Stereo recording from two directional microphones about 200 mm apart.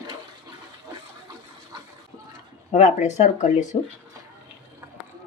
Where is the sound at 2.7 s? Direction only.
35° left (ahead or behind).